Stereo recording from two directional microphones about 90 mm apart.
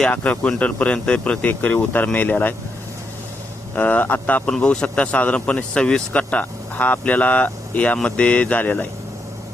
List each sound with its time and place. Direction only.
0.0 s speech: 15° left (ahead or behind)
3.8 s speech: 15° left (ahead or behind)